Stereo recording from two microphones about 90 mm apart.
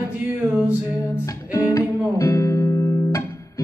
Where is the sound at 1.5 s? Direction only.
35° left (ahead or behind).